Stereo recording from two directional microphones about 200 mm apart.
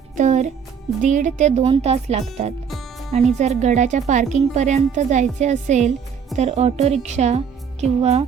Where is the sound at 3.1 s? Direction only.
35° right (ahead or behind).